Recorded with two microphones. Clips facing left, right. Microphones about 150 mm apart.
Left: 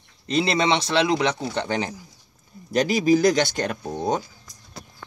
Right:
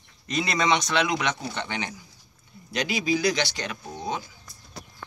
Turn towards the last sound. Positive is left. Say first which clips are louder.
# left 7 dB
turn(degrees=45)  # may be behind; listen again after turning